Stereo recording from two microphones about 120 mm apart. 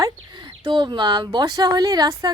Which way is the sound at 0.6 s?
40° right (ahead or behind).